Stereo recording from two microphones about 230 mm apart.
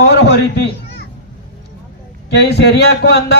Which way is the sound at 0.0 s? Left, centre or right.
Left.